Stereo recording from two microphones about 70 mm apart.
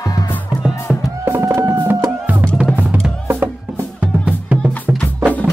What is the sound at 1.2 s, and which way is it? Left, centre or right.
Music, right.